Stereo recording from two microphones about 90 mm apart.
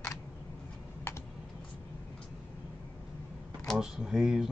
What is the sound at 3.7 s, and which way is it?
Speech, 5° right (ahead or behind).